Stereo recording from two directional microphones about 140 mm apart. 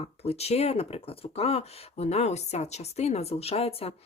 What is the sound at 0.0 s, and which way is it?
Speech, 45° left (ahead or behind).